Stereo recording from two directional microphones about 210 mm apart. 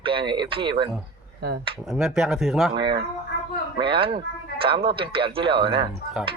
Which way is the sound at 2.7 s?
20° right (ahead or behind).